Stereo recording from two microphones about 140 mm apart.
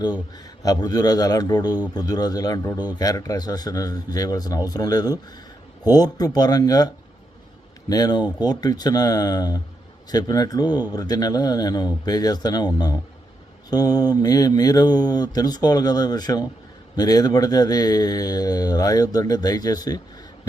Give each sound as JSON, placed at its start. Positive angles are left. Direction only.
{"t": 0.3, "sound": "a man's voice", "side_deg": 30}